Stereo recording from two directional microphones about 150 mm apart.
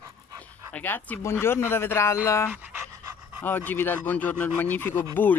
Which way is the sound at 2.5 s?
15° right (ahead or behind).